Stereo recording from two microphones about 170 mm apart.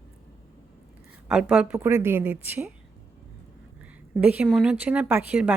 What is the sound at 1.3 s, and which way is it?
A woman's voice, 5° right (ahead or behind).